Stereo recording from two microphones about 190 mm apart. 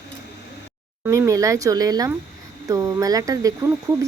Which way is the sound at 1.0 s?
15° right (ahead or behind).